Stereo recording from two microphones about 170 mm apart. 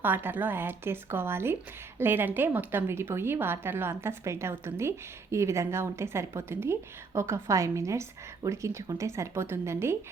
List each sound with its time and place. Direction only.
0.0 s a woman's voice: 10° right (ahead or behind)